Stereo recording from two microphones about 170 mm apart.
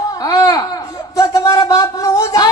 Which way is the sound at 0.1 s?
20° left (ahead or behind).